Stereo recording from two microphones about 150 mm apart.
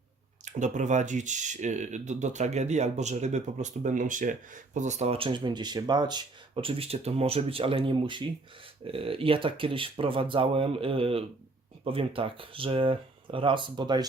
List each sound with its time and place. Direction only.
0.4 s speech: 55° right (ahead or behind); by 14.1 s 30° right (ahead or behind)